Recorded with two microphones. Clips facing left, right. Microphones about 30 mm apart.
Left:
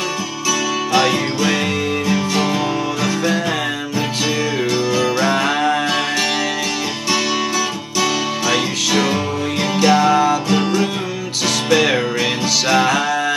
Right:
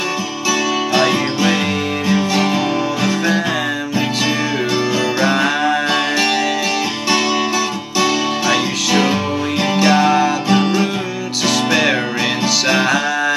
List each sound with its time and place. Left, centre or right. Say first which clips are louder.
0.9 s music: even; centre
4.9 s music: even; centre
8.0 s music: right 2 dB; centre